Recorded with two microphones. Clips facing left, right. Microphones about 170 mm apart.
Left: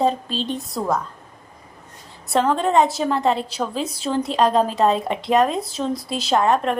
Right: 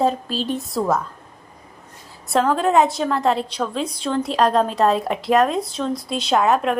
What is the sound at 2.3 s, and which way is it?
A woman's voice, centre (ahead or behind).